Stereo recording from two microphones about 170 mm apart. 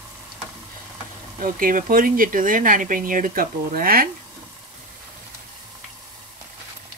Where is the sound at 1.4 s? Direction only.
55° right (ahead or behind).